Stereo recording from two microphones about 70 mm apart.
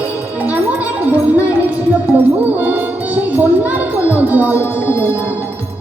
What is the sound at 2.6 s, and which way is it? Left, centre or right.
Music, right.